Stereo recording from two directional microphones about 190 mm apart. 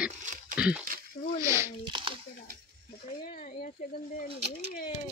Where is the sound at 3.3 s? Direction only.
45° left (ahead or behind).